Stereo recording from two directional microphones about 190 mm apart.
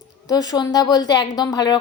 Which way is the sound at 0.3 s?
20° left (ahead or behind).